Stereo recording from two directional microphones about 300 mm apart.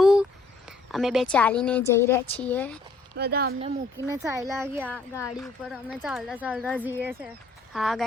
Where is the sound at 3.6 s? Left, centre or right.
Centre.